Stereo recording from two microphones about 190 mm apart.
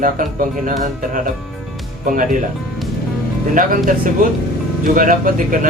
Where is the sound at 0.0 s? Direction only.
45° right (ahead or behind).